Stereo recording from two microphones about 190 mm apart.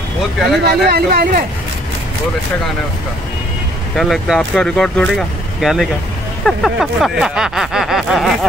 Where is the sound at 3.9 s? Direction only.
Centre (ahead or behind).